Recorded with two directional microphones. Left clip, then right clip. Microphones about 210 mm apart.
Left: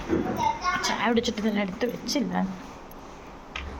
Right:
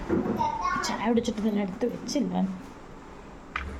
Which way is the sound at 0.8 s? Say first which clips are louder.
Left 2 dB; 10° right (ahead or behind).